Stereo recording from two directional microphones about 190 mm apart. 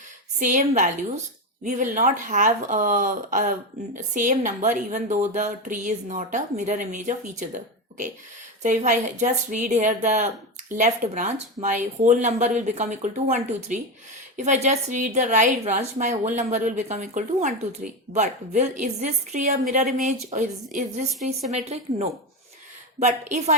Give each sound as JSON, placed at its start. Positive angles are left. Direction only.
{"t": 0.3, "sound": "a woman's voice", "side_deg": -40}
{"t": 8.6, "sound": "a woman's voice", "side_deg": -40}